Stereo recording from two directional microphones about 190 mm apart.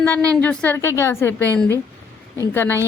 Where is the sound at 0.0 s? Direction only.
10° left (ahead or behind).